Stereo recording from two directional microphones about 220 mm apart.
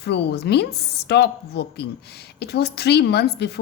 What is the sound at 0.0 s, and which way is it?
A woman's voice, 45° left (ahead or behind).